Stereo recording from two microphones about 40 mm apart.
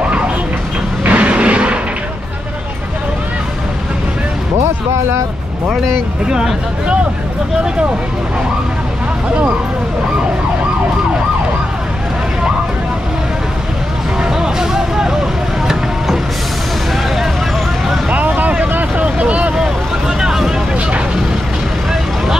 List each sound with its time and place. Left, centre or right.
1.0 s vehicle: right
6.2 s speech: centre
14.2 s vehicle: centre
18.1 s vehicle: right
19.5 s vehicle: centre